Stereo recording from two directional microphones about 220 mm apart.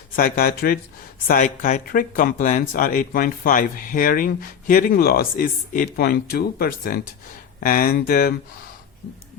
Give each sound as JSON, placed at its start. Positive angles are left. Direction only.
{"t": 0.2, "sound": "speech", "side_deg": 40}